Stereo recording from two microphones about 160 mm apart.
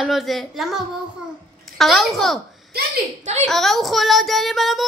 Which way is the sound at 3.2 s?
45° right (ahead or behind).